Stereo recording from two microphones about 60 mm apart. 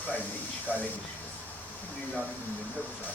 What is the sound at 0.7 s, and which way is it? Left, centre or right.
Speech, left.